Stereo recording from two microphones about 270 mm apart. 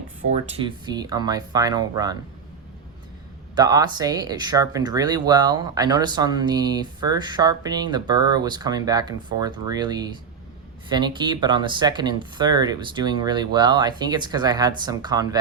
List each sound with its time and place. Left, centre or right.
0.6 s speech: centre
3.5 s speech: centre